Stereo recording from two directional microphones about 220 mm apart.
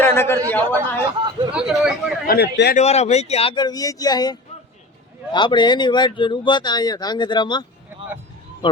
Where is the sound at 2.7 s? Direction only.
30° left (ahead or behind).